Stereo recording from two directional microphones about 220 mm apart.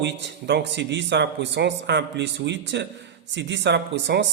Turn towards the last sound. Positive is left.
turn(degrees=-50)  # may be behind; listen again after turning